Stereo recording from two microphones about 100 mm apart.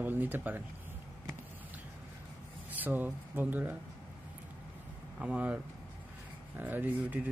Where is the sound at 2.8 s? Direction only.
20° right (ahead or behind).